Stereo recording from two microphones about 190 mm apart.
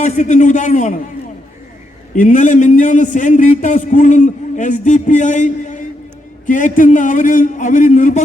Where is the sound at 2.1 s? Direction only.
45° left (ahead or behind).